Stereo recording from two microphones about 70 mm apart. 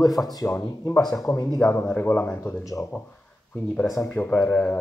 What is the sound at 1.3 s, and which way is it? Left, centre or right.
Speech, left.